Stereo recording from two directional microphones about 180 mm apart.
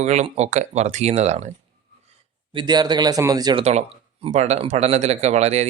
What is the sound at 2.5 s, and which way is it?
Speech, 25° right (ahead or behind).